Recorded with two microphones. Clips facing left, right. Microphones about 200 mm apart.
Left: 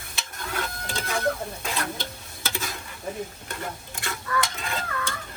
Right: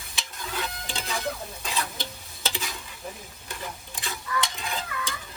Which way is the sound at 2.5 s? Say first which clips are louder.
Left 2 dB; 50° left (ahead or behind).